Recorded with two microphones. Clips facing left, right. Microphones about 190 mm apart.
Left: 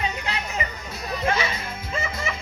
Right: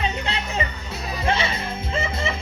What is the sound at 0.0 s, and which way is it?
Music, 25° right (ahead or behind).